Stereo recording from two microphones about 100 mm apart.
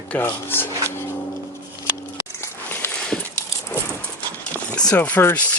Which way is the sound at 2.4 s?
20° left (ahead or behind).